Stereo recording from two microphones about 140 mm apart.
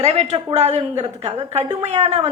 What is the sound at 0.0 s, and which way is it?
A woman's voice, 50° right (ahead or behind).